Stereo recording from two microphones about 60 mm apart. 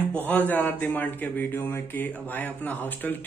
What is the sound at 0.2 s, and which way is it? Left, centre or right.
A man's voice, left.